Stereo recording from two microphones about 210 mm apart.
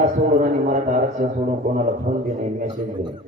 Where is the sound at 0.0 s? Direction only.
35° right (ahead or behind).